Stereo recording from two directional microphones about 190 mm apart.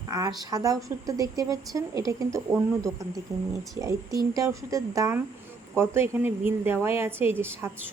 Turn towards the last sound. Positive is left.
turn(degrees=-10)  # may be behind; listen again after turning